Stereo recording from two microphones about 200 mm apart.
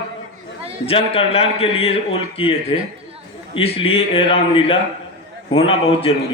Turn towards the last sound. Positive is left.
turn(degrees=30)  # may be behind; listen again after turning